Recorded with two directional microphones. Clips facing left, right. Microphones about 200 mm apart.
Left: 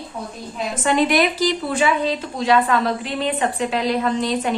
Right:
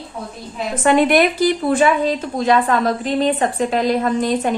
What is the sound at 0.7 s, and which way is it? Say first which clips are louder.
A woman's voice: right 4 dB; 55° right (ahead or behind).